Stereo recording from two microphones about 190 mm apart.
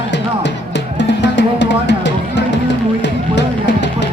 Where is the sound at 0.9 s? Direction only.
65° left (ahead or behind).